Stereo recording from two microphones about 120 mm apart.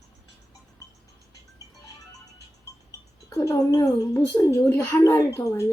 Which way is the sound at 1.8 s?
30° left (ahead or behind).